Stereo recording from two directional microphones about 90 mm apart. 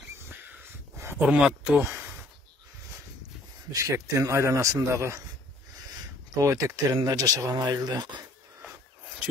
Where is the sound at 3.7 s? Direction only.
35° right (ahead or behind).